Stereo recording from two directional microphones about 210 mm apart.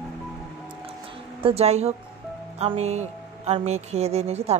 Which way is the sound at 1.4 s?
30° right (ahead or behind).